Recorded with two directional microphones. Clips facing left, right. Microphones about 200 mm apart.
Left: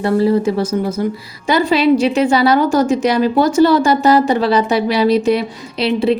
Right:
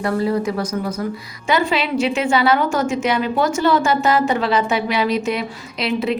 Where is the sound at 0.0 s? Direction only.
30° left (ahead or behind).